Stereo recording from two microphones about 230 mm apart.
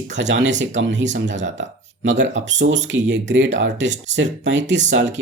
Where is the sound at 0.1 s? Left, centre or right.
Right.